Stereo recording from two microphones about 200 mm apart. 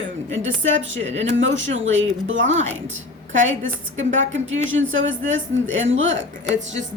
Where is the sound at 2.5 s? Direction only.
35° right (ahead or behind).